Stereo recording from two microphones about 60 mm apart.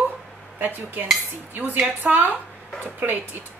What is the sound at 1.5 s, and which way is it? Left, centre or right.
A woman's voice, right.